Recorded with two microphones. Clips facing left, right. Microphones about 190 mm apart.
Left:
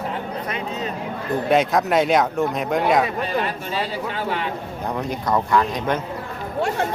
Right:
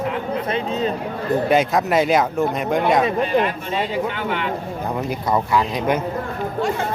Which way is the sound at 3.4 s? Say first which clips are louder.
Right 2 dB; 35° left (ahead or behind).